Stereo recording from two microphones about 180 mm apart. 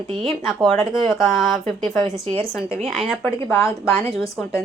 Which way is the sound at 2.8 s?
Centre (ahead or behind).